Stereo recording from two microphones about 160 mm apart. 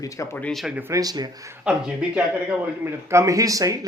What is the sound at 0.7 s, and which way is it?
Speech, 20° right (ahead or behind).